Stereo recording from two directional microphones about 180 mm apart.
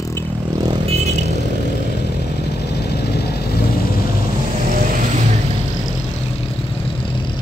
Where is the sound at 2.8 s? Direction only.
65° left (ahead or behind).